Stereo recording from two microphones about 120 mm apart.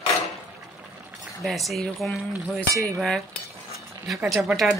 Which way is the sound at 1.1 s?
Centre (ahead or behind).